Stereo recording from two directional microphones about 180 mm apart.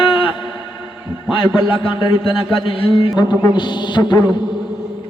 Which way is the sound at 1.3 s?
30° left (ahead or behind).